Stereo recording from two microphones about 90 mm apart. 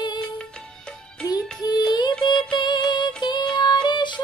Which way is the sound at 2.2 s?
55° left (ahead or behind).